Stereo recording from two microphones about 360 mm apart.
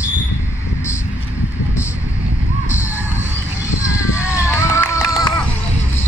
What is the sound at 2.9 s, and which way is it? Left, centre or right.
Music, centre.